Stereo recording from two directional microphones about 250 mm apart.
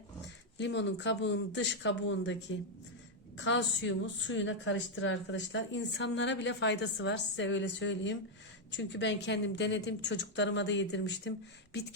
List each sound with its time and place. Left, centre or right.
0.6 s a woman's voice: left
3.3 s a woman's voice: left